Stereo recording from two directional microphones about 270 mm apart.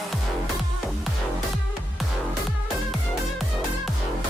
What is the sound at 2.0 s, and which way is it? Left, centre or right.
Music, centre.